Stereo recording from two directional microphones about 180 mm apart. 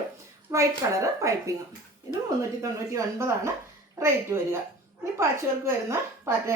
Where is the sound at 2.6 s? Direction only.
15° right (ahead or behind).